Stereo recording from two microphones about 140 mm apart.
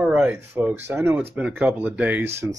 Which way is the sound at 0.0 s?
10° right (ahead or behind).